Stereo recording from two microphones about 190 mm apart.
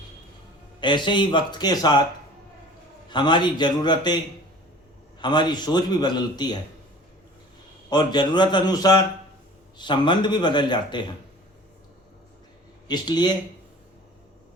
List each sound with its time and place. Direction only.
0.8 s a man's voice: 25° left (ahead or behind)
3.1 s a man's voice: 25° left (ahead or behind)
5.2 s a man's voice: 25° left (ahead or behind)
7.9 s a man's voice: 20° left (ahead or behind)
12.9 s a man's voice: 20° left (ahead or behind)